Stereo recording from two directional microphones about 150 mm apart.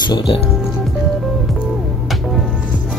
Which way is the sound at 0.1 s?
35° left (ahead or behind).